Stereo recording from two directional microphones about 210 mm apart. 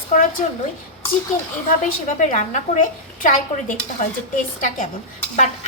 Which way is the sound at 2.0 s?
35° left (ahead or behind).